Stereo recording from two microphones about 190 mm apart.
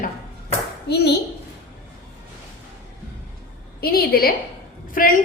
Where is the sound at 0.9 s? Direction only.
60° left (ahead or behind).